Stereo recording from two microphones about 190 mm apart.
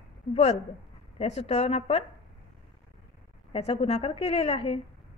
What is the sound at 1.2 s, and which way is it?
Speech, 35° left (ahead or behind).